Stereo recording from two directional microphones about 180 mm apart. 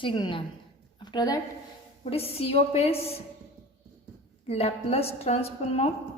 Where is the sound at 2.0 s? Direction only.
35° left (ahead or behind).